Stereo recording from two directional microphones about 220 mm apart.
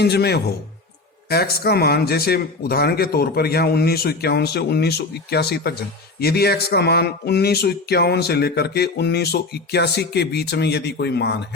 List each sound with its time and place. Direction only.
0.0 s speech: 45° left (ahead or behind)